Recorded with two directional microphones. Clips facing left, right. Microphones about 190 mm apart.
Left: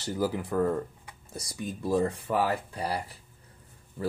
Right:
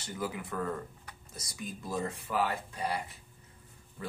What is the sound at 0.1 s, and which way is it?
Speech, 35° left (ahead or behind).